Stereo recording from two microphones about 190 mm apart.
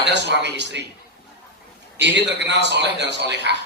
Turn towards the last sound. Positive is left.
turn(degrees=-65)  # may be behind; listen again after turning